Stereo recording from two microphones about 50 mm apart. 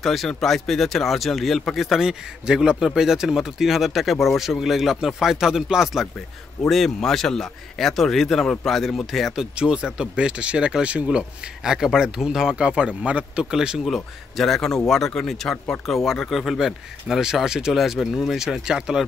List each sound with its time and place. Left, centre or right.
0.0 s speech: centre
2.0 s speech: centre
6.7 s speech: centre
9.4 s speech: centre
11.1 s speech: centre
13.8 s speech: centre
15.5 s speech: left
15.9 s speech: centre
17.9 s speech: centre